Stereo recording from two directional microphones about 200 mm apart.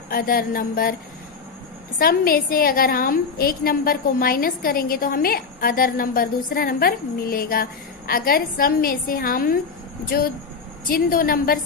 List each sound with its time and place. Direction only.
0.1 s a woman's voice: 45° left (ahead or behind)
2.0 s a woman's voice: 45° left (ahead or behind)